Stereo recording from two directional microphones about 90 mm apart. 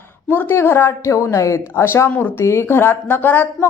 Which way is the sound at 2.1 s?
20° left (ahead or behind).